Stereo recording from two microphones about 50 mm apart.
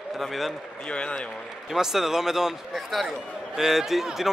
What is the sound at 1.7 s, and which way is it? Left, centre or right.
A man's voice, centre.